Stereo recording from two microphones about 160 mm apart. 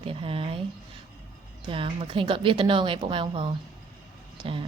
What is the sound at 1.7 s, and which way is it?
A woman's voice, 35° right (ahead or behind).